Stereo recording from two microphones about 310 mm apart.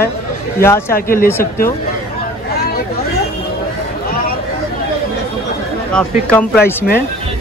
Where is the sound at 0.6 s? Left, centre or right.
Centre.